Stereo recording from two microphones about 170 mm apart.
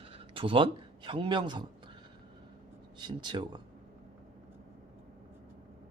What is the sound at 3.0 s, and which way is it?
Speech, 25° right (ahead or behind).